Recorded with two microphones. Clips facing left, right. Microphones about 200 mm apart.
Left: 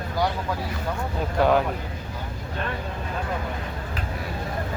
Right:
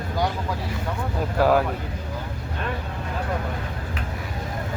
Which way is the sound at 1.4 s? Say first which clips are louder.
Right 1 dB; 5° right (ahead or behind).